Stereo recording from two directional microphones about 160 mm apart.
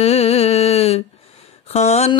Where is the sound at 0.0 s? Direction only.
40° left (ahead or behind).